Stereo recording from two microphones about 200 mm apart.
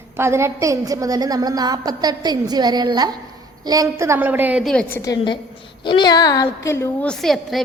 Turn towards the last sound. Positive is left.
turn(degrees=0)  # may be behind; listen again after turning